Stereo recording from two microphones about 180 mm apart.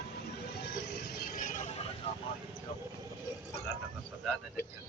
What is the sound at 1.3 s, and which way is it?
Vehicle, 50° left (ahead or behind).